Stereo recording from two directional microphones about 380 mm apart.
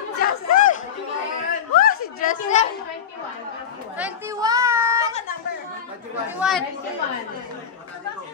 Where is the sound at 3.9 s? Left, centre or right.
Centre.